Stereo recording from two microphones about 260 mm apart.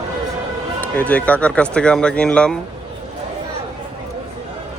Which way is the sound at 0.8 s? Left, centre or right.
Centre.